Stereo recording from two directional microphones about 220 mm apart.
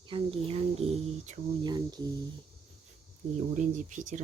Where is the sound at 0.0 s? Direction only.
25° right (ahead or behind).